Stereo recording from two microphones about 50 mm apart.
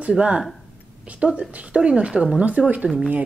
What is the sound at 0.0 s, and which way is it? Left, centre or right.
Speech, right.